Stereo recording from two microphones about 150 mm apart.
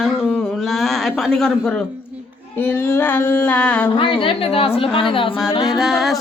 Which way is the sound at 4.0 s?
35° left (ahead or behind).